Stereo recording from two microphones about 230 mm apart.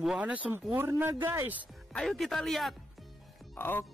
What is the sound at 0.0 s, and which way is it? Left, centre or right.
Speech, centre.